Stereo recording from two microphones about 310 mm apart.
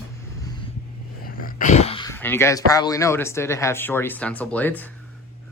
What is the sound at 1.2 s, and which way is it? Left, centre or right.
Dog, left.